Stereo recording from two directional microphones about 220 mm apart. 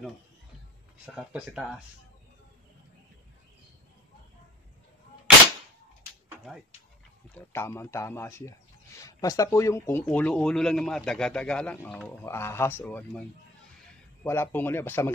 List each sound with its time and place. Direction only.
1.1 s speech: 5° right (ahead or behind)
7.3 s speech: 10° left (ahead or behind)
14.2 s speech: 10° left (ahead or behind)